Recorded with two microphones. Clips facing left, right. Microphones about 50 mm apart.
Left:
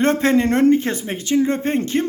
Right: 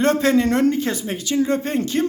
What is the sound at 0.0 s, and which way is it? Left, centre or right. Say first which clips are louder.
Speech: left 1 dB; left.